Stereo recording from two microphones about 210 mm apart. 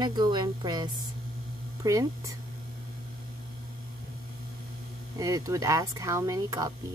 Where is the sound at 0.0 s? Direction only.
20° right (ahead or behind).